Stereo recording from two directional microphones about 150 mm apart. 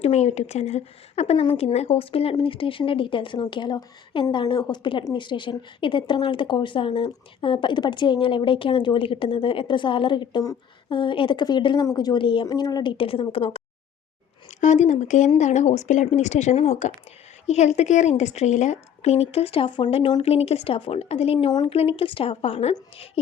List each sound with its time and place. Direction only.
0.0 s speech: 45° left (ahead or behind)
14.6 s a woman's voice: 55° left (ahead or behind)